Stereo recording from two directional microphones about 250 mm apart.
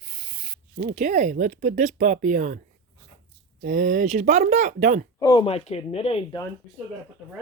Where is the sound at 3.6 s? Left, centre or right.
Right.